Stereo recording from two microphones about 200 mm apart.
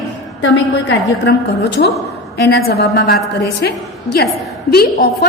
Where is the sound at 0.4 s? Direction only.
65° left (ahead or behind).